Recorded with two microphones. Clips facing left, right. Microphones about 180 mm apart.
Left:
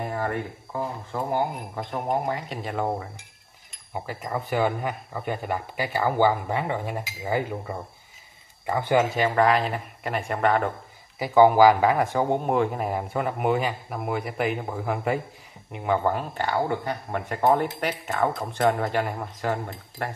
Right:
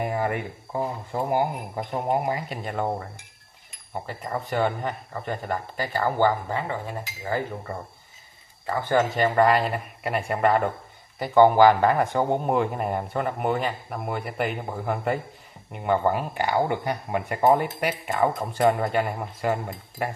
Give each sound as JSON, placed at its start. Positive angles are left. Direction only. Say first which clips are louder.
{"t": 0.0, "sound": "a sound", "louder": "right 2 dB", "side_deg": -15}
{"t": 1.3, "sound": "speech", "louder": "right 2 dB", "side_deg": -15}
{"t": 2.3, "sound": "speech", "louder": "even", "side_deg": 0}
{"t": 9.1, "sound": "speech", "louder": "right 1 dB", "side_deg": 0}